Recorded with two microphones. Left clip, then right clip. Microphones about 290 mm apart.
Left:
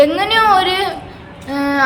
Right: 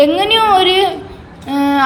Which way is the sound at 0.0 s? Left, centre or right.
Centre.